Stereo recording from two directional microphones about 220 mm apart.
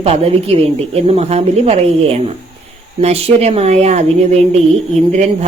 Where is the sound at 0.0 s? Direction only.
25° right (ahead or behind).